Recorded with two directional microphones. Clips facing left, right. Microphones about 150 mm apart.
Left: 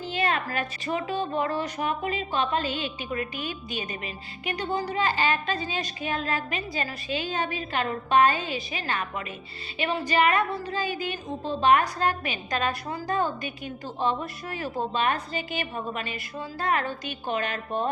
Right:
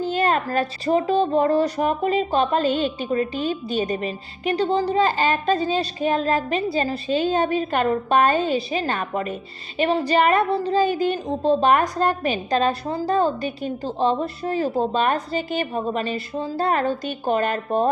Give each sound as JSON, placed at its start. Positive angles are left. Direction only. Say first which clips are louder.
{"t": 0.0, "sound": "a woman's voice", "louder": "right 7 dB", "side_deg": -45}